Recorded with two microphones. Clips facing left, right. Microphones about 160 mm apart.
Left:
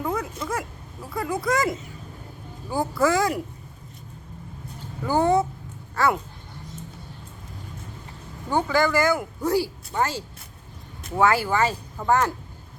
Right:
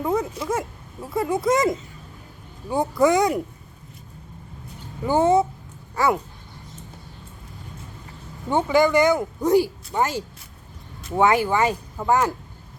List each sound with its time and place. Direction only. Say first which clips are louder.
0.0 s a sound: right 4 dB; 20° right (ahead or behind)
1.1 s speech: right 4 dB; 25° right (ahead or behind)
5.0 s speech: right 2 dB; 20° right (ahead or behind)
8.4 s speech: right 3 dB; 20° right (ahead or behind)